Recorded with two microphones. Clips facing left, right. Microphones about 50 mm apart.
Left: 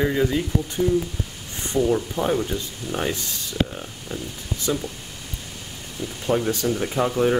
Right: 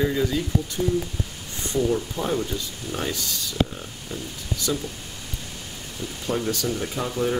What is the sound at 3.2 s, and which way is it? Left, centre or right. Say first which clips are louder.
Speech: right 1 dB; left.